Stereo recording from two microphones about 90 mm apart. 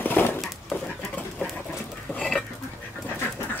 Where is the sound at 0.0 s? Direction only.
20° left (ahead or behind).